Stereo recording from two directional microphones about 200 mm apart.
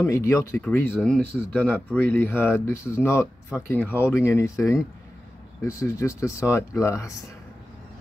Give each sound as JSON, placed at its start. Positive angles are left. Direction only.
{"t": 0.0, "sound": "speech", "side_deg": 15}